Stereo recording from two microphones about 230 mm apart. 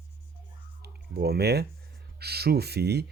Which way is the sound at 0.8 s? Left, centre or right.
Right.